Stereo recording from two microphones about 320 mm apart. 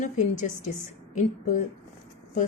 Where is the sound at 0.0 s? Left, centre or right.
Left.